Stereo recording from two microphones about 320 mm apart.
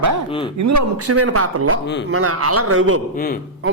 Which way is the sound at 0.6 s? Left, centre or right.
Right.